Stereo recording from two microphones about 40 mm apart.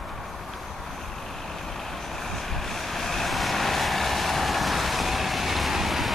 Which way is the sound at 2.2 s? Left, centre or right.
Centre.